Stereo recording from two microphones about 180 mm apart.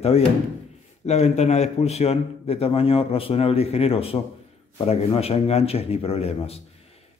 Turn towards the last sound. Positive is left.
turn(degrees=35)  # may be behind; listen again after turning